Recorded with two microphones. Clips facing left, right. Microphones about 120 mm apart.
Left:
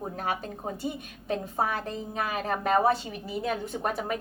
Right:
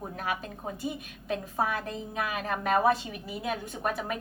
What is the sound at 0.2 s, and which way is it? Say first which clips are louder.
A woman's voice: left 1 dB; 35° left (ahead or behind).